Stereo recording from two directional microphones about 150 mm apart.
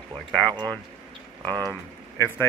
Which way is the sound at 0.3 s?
5° left (ahead or behind).